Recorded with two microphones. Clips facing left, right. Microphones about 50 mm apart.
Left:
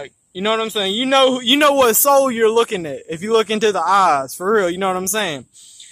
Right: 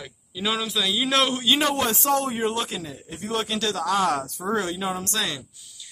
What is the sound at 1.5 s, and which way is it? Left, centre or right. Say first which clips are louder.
Speech: left 11 dB; left.